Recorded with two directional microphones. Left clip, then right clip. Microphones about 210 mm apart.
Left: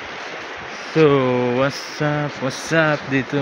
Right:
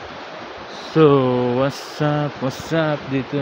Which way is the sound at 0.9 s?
20° right (ahead or behind).